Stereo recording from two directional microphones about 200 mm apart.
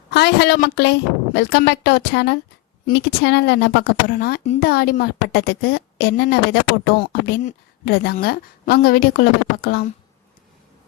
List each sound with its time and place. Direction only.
0.1 s a woman's voice: 55° left (ahead or behind)